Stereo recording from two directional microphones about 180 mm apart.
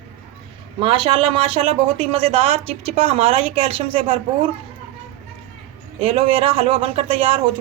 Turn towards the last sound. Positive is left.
turn(degrees=-30)  # may be behind; listen again after turning